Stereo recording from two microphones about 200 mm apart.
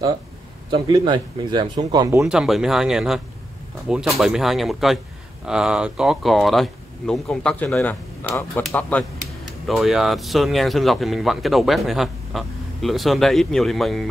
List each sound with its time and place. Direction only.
0.7 s speech: 25° right (ahead or behind)
2.2 s speech: centre (ahead or behind)